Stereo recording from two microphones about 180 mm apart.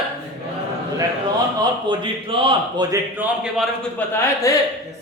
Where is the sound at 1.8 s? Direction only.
30° right (ahead or behind).